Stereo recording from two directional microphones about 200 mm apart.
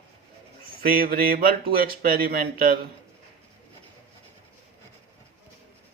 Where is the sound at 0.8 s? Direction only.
45° right (ahead or behind).